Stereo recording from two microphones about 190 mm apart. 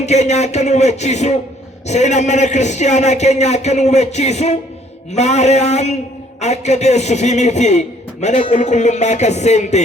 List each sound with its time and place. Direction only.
0.0 s a man's voice: 35° left (ahead or behind)